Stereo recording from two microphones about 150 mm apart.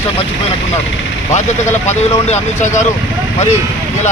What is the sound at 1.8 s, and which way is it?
Speech, 50° left (ahead or behind).